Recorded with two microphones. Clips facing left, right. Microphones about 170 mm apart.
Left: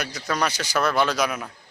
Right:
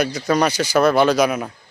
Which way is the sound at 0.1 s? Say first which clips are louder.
Right 7 dB; 20° right (ahead or behind).